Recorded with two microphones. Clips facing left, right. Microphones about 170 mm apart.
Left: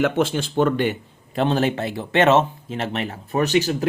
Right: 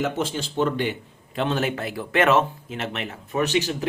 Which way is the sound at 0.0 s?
60° left (ahead or behind).